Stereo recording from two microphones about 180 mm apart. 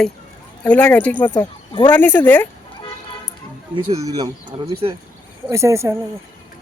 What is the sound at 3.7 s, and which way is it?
Speech, 20° right (ahead or behind).